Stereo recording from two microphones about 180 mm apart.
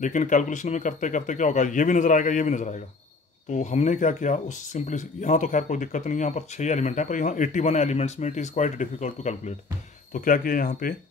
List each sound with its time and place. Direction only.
0.0 s speech: 45° left (ahead or behind)